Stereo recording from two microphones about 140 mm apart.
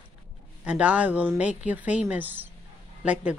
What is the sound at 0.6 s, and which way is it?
Speech, 10° right (ahead or behind).